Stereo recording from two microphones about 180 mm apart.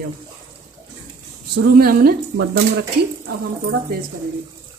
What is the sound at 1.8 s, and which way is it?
Speech, 55° right (ahead or behind).